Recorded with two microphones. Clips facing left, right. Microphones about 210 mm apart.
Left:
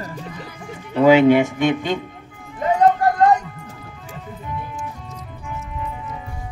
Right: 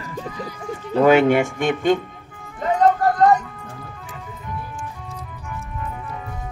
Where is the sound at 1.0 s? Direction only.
50° right (ahead or behind).